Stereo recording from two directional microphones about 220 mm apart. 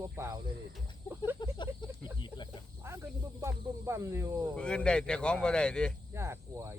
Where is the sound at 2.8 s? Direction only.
10° right (ahead or behind).